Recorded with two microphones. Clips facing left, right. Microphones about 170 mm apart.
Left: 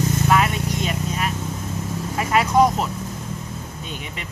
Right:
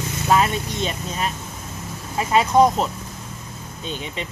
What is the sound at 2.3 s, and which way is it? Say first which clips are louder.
Speech: right 1 dB; 25° right (ahead or behind).